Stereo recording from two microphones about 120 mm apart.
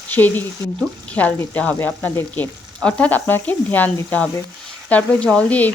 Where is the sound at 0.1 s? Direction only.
15° left (ahead or behind).